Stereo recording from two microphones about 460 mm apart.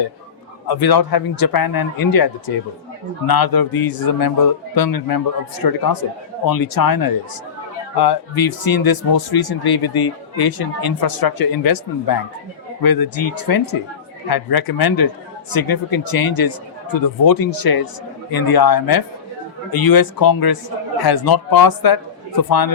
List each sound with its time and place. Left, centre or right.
0.7 s speech: left